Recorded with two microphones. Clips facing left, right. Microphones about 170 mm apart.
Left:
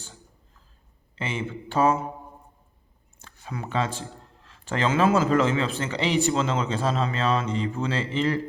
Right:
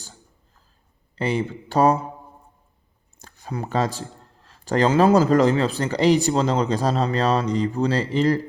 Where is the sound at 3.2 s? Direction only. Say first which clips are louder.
Right 5 dB; 40° right (ahead or behind).